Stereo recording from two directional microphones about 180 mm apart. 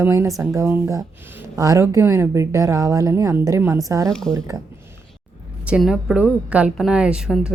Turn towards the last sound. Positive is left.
turn(degrees=-5)  # may be behind; listen again after turning